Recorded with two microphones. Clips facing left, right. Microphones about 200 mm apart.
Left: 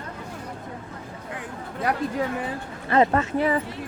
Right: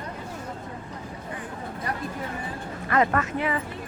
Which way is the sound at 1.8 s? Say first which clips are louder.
Left 7 dB; 90° left.